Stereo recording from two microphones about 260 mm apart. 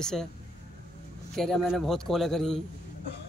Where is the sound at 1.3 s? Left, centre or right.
Centre.